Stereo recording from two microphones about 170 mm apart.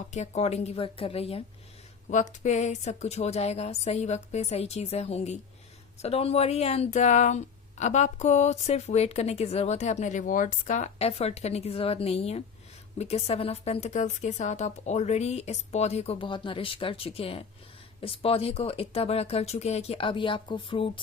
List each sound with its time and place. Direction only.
0.1 s speech: 40° left (ahead or behind)
2.0 s speech: 45° left (ahead or behind); by 21.0 s 30° left (ahead or behind)